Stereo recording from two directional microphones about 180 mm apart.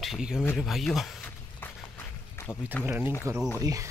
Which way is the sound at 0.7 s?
Centre (ahead or behind).